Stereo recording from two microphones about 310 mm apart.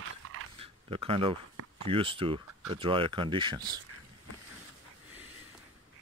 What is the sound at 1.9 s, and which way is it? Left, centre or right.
Speech, centre.